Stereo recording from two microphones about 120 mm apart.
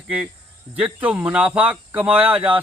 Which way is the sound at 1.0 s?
10° right (ahead or behind).